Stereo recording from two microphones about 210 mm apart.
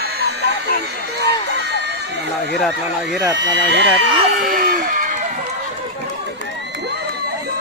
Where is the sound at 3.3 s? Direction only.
60° right (ahead or behind); by 5.2 s 40° right (ahead or behind).